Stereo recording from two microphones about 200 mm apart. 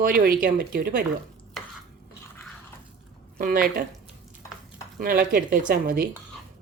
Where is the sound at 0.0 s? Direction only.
45° right (ahead or behind).